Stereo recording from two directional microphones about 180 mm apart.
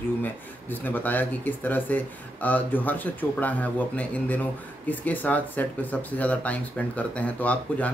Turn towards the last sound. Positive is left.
turn(degrees=10)  # may be behind; listen again after turning